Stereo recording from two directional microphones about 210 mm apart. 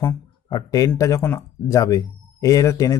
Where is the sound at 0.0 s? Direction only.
15° left (ahead or behind).